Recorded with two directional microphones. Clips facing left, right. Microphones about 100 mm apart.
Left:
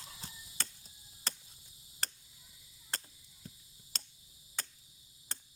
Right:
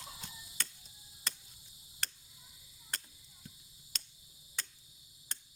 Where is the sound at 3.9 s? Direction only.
35° left (ahead or behind).